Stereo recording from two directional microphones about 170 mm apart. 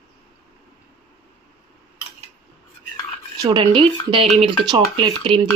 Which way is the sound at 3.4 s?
30° right (ahead or behind).